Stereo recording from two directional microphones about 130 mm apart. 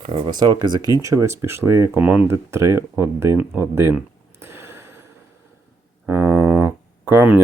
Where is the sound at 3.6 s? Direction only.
20° right (ahead or behind).